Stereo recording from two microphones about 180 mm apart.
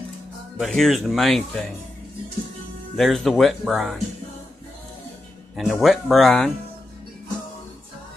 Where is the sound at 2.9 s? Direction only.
Centre (ahead or behind).